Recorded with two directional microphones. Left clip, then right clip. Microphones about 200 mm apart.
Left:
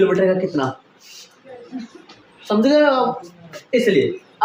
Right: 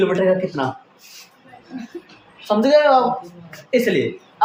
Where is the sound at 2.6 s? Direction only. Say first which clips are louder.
Right 2 dB; 25° right (ahead or behind).